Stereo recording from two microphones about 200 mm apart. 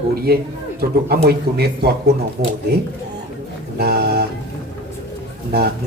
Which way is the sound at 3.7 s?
55° right (ahead or behind).